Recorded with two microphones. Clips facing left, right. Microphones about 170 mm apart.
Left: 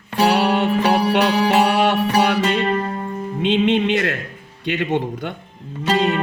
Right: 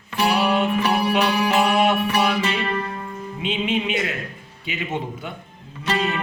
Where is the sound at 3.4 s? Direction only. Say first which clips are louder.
Left 7 dB; 70° left (ahead or behind).